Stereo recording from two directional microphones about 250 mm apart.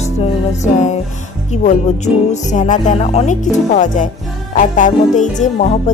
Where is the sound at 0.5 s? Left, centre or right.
Left.